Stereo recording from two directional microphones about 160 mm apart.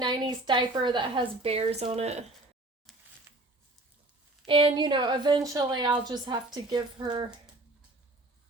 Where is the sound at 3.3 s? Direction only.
15° right (ahead or behind).